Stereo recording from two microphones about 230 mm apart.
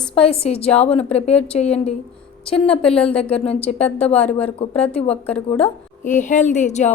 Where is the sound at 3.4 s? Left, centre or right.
Left.